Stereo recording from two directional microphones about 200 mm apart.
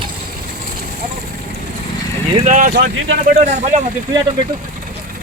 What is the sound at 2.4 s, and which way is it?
Speech, 40° right (ahead or behind).